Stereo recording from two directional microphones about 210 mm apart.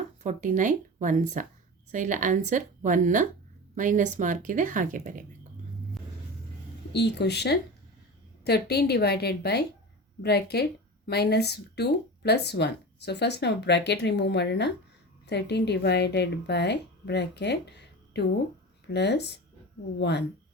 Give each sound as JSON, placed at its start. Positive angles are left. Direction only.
{"t": 0.2, "sound": "speech", "side_deg": -35}
{"t": 6.9, "sound": "speech", "side_deg": 55}